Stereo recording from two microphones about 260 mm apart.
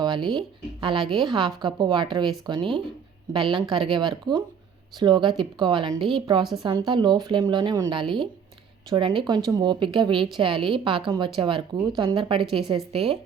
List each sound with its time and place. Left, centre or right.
0.0 s a sound: centre
0.3 s speech: centre
12.4 s speech: centre
12.6 s speech: centre